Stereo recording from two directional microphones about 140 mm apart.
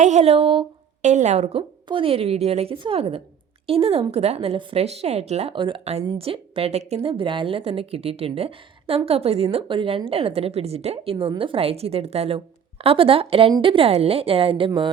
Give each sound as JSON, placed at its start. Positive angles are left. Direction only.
{"t": 0.0, "sound": "a woman's voice", "side_deg": -55}
{"t": 1.0, "sound": "a woman's voice", "side_deg": -55}